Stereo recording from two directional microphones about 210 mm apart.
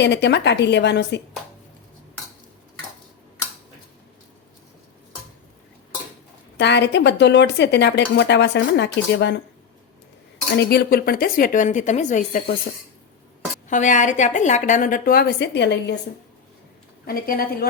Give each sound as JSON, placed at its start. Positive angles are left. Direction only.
{"t": 0.0, "sound": "speech", "side_deg": 55}
{"t": 6.6, "sound": "speech", "side_deg": 55}
{"t": 10.6, "sound": "a woman's voice", "side_deg": 45}
{"t": 13.7, "sound": "a woman's voice", "side_deg": 35}
{"t": 17.1, "sound": "a woman's voice", "side_deg": 45}